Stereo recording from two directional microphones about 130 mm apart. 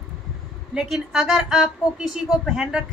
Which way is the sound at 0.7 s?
Centre (ahead or behind).